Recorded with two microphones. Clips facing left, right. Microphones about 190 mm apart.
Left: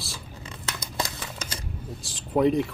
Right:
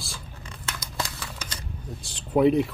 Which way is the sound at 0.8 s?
25° left (ahead or behind).